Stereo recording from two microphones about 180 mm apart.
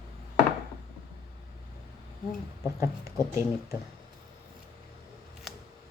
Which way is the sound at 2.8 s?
15° right (ahead or behind).